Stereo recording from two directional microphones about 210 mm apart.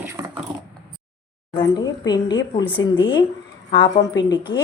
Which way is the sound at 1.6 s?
20° left (ahead or behind).